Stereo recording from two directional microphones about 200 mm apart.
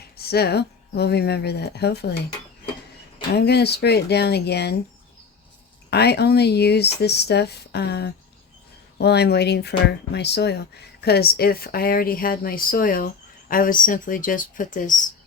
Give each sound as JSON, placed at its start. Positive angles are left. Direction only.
{"t": 0.2, "sound": "speech", "side_deg": 50}
{"t": 3.3, "sound": "speech", "side_deg": 55}
{"t": 5.9, "sound": "speech", "side_deg": 55}